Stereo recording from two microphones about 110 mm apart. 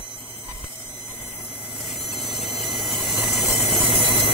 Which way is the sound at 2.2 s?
Centre (ahead or behind).